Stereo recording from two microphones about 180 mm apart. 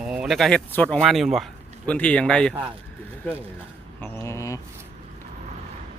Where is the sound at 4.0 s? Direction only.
15° left (ahead or behind).